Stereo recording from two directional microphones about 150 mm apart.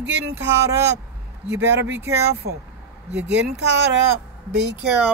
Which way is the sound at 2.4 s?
90° right.